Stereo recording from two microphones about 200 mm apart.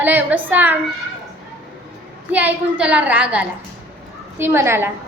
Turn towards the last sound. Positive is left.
turn(degrees=-10)  # may be behind; listen again after turning